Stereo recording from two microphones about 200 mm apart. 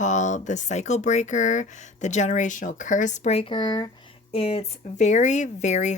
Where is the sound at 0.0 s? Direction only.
35° left (ahead or behind).